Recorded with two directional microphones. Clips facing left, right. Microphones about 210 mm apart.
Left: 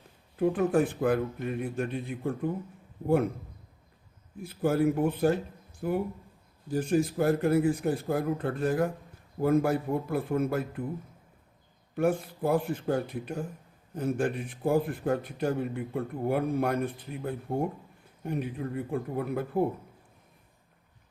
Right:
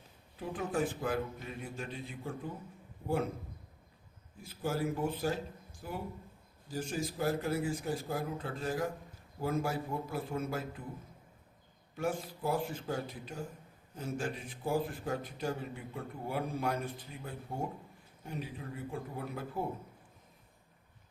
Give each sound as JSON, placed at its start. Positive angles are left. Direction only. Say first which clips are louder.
{"t": 0.3, "sound": "a man's voice", "louder": "left 10 dB", "side_deg": 55}
{"t": 4.4, "sound": "a man's voice", "louder": "left 9 dB", "side_deg": 60}
{"t": 11.9, "sound": "a man's voice", "louder": "left 8 dB", "side_deg": 60}